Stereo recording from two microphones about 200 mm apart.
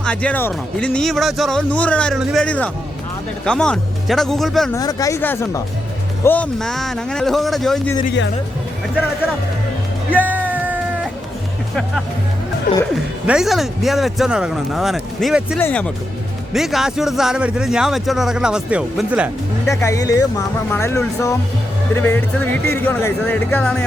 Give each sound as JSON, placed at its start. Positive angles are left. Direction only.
{"t": 0.0, "sound": "a man's voice", "side_deg": 5}
{"t": 4.7, "sound": "a man's voice", "side_deg": 20}
{"t": 10.2, "sound": "a sound", "side_deg": -10}
{"t": 11.7, "sound": "a man's voice", "side_deg": 0}
{"t": 13.2, "sound": "a man's voice", "side_deg": 0}
{"t": 15.5, "sound": "speech", "side_deg": 10}
{"t": 16.5, "sound": "a man's voice", "side_deg": 0}
{"t": 19.6, "sound": "speech", "side_deg": 15}